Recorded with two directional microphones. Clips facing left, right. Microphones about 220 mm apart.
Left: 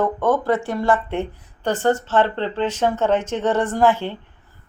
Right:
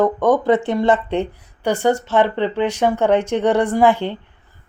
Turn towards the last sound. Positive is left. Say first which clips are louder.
# right 3 dB
turn(degrees=-15)  # may be behind; listen again after turning